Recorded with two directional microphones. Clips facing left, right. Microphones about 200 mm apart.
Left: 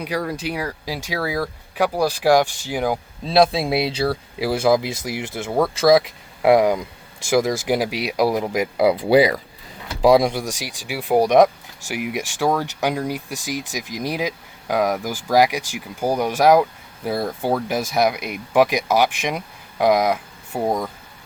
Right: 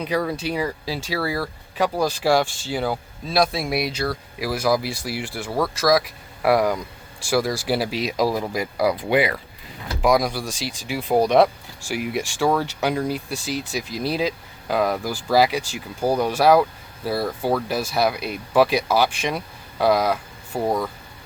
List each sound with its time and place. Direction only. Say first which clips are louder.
0.0 s speech: right 1 dB; 10° left (ahead or behind)
3.2 s speech: left 5 dB; 25° left (ahead or behind)
9.0 s speech: left 5 dB; 35° left (ahead or behind); by 20.7 s 15° left (ahead or behind)